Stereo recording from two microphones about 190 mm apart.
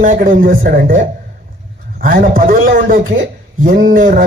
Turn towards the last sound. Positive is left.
turn(degrees=-50)  # may be behind; listen again after turning